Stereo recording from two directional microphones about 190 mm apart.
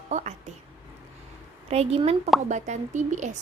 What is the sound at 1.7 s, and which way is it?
Speech, 35° right (ahead or behind).